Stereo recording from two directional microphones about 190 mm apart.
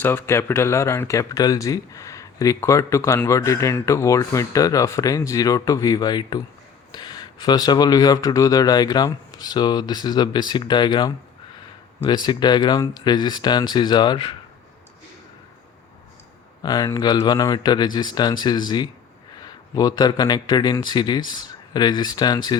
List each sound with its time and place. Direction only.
0.0 s speech: 10° left (ahead or behind)
16.6 s a man's voice: 20° left (ahead or behind)